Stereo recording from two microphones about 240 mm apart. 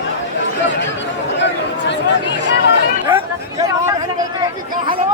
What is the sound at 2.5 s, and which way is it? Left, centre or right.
Speech, left.